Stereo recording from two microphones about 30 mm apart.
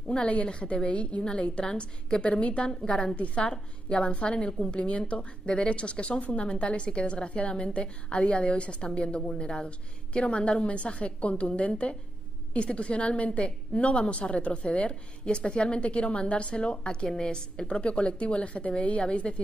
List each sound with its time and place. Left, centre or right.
0.2 s a woman's voice: left
17.6 s a woman's voice: left